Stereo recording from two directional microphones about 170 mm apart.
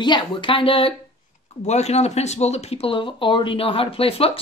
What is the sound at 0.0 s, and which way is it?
Speech, 30° left (ahead or behind).